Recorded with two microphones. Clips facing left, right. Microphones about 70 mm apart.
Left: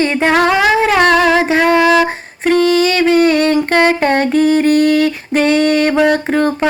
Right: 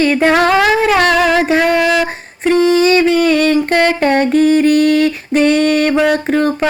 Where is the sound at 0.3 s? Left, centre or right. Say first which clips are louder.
Left 1 dB; centre.